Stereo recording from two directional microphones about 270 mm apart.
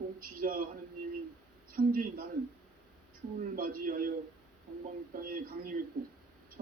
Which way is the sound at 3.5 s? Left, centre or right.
Right.